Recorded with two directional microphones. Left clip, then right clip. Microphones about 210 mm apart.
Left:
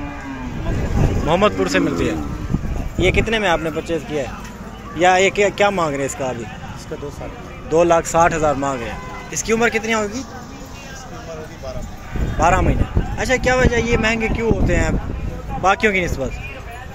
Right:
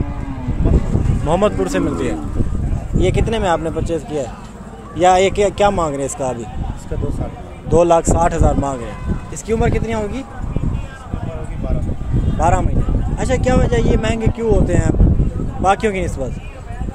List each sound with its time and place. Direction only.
1.2 s speech: 15° right (ahead or behind)
7.7 s speech: 15° right (ahead or behind)
12.4 s speech: 5° right (ahead or behind)